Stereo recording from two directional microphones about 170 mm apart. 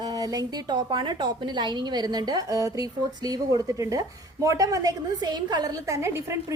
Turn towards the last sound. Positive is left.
turn(degrees=-15)  # may be behind; listen again after turning